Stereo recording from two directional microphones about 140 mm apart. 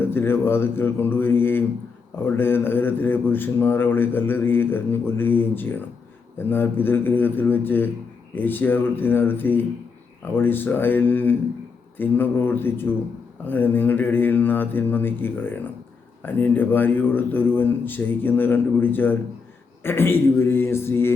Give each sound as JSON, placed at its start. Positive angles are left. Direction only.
{"t": 0.0, "sound": "speech", "side_deg": 15}